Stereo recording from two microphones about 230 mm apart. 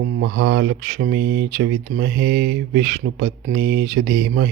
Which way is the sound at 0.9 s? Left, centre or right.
Right.